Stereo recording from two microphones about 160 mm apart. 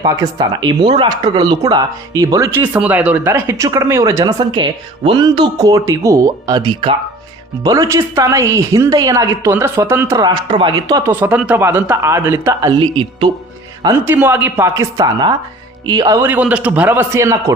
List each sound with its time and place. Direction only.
0.0 s speech: 30° right (ahead or behind)
11.1 s a man's voice: 10° right (ahead or behind); by 13.3 s 30° right (ahead or behind)
13.8 s a man's voice: 15° right (ahead or behind)
16.2 s a man's voice: 10° right (ahead or behind)